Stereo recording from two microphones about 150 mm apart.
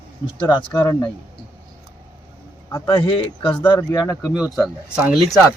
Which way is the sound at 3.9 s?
20° left (ahead or behind).